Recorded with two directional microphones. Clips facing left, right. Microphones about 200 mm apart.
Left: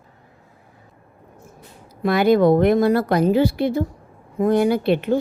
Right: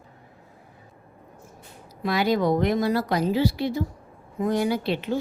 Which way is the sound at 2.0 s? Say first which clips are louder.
Left 7 dB; 55° left (ahead or behind).